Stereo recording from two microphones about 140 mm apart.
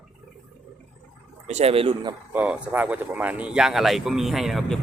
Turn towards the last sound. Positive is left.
turn(degrees=0)  # may be behind; listen again after turning